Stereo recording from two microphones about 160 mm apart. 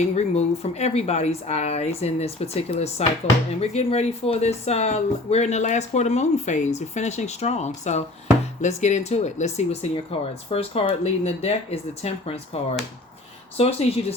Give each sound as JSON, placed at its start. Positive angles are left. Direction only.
{"t": 0.1, "sound": "speech", "side_deg": 45}